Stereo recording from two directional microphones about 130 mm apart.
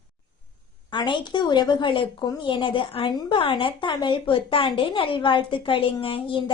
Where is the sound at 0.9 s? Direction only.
35° left (ahead or behind).